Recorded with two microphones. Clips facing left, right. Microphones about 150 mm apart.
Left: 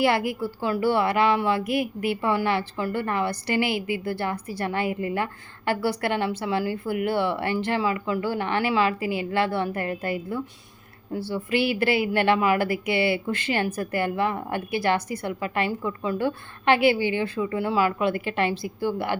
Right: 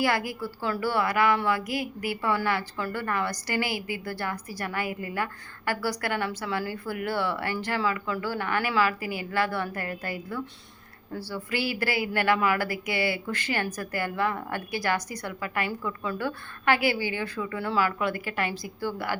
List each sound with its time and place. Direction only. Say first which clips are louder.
0.0 s a woman's voice: left 4 dB; 25° left (ahead or behind)